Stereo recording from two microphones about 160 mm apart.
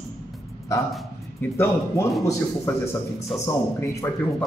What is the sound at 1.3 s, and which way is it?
Speech, 15° left (ahead or behind).